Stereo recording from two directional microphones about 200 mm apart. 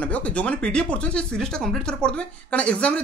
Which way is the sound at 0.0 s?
5° left (ahead or behind).